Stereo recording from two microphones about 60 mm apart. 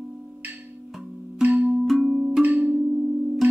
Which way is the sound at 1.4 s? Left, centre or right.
Right.